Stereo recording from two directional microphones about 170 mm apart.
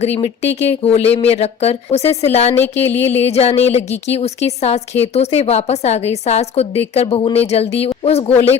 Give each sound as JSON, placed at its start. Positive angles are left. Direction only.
{"t": 0.0, "sound": "a woman's voice", "side_deg": 35}
{"t": 2.6, "sound": "a sound", "side_deg": 10}
{"t": 2.9, "sound": "a woman's voice", "side_deg": 35}